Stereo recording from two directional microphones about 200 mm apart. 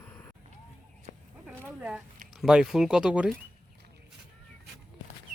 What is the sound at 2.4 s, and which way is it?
Speech, 5° right (ahead or behind).